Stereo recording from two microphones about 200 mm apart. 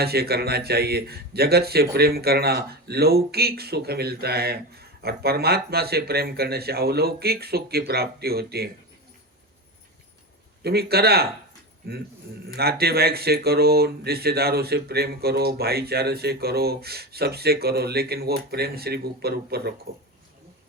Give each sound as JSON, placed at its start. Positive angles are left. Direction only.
{"t": 0.0, "sound": "a man's voice", "side_deg": -50}
{"t": 10.6, "sound": "a man's voice", "side_deg": -55}
{"t": 12.5, "sound": "a man's voice", "side_deg": -50}